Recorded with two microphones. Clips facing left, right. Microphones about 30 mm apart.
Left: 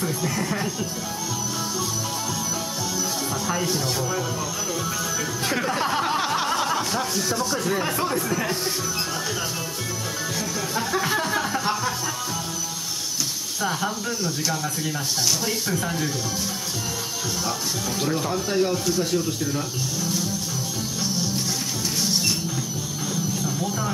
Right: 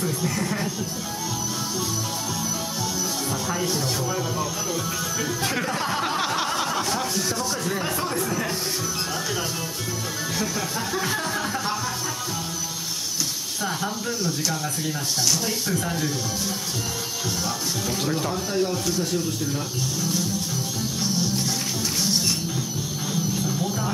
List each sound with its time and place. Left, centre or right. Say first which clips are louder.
0.2 s speech: even; centre
3.4 s speech: left 1 dB; centre
5.5 s a sound: left 2 dB; centre
10.9 s music: left 4 dB; centre
13.7 s speech: left 2 dB; centre
18.0 s speech: left 3 dB; centre
18.5 s speech: left 3 dB; centre
18.9 s speech: left 2 dB; centre
21.0 s music: right 1 dB; centre
23.3 s music: even; centre